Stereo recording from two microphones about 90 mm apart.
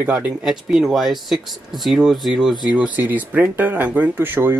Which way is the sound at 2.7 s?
15° right (ahead or behind).